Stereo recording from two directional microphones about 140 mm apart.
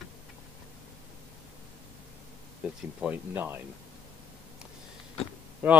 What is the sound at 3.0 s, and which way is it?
Speech, 15° right (ahead or behind).